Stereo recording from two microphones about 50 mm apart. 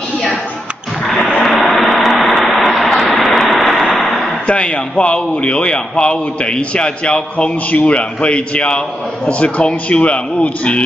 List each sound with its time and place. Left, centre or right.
1.4 s vehicle: centre
4.5 s a man's voice: left